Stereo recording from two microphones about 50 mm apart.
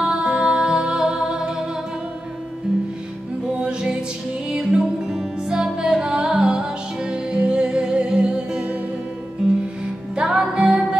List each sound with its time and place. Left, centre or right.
0.0 s music: centre
3.6 s music: centre
10.1 s music: centre